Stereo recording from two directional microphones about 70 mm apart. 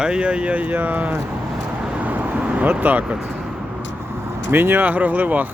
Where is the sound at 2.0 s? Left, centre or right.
Right.